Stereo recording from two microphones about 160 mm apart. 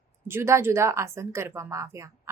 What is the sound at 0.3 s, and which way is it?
A woman's voice, 15° right (ahead or behind).